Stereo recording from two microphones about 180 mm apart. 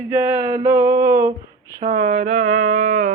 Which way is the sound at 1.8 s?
35° right (ahead or behind).